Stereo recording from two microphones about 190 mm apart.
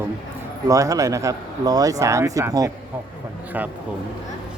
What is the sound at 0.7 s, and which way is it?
A man's voice, 15° right (ahead or behind).